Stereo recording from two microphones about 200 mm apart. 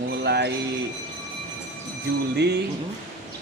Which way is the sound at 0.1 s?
55° right (ahead or behind).